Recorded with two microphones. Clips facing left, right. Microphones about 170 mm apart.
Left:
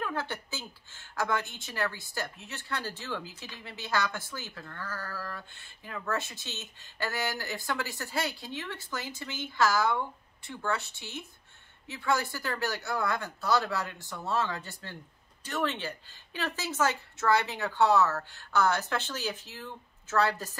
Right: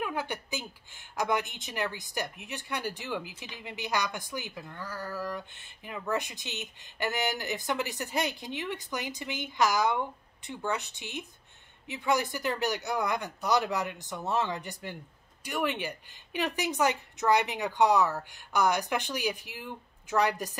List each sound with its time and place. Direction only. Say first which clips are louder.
0.0 s speech: right 1 dB; 15° right (ahead or behind)